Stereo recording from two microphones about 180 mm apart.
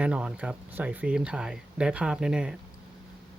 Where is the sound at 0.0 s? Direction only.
5° right (ahead or behind).